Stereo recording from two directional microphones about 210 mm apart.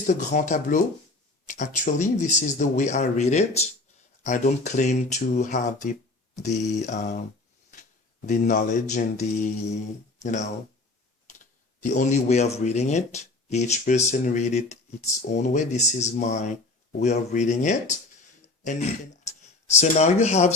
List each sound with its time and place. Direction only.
0.0 s speech: 35° left (ahead or behind)
8.3 s speech: 40° left (ahead or behind)
11.8 s speech: 35° left (ahead or behind)